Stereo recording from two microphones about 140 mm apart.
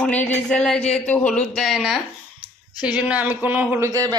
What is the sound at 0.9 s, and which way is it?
Speech, 10° left (ahead or behind).